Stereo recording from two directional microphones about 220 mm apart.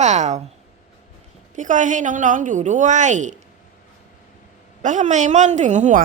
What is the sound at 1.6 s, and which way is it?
A woman's voice, 35° right (ahead or behind).